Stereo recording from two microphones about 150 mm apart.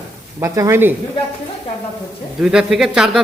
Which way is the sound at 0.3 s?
20° right (ahead or behind).